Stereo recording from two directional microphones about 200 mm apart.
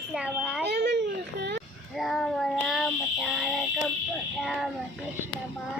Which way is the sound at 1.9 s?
Centre (ahead or behind).